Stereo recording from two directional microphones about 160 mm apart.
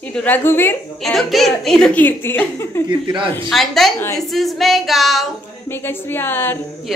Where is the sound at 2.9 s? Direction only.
30° right (ahead or behind).